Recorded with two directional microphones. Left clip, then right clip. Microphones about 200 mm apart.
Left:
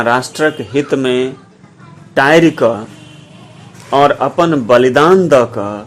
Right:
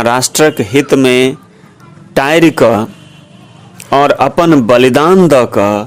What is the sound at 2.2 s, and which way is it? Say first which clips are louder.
Speech: right 1 dB; 35° right (ahead or behind).